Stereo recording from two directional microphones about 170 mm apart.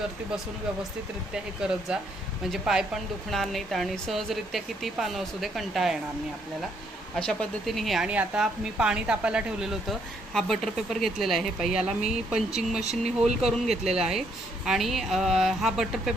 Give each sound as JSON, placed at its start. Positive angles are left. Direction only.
{"t": 1.3, "sound": "a woman's voice", "side_deg": -5}
{"t": 7.2, "sound": "a woman's voice", "side_deg": 5}
{"t": 12.8, "sound": "speech", "side_deg": -40}
{"t": 13.4, "sound": "a woman's voice", "side_deg": -5}